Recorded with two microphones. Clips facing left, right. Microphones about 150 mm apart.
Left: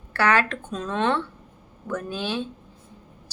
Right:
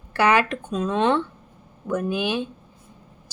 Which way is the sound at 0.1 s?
15° right (ahead or behind).